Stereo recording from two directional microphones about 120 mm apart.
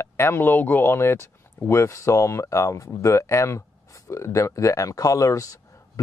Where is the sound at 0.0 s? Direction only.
20° left (ahead or behind).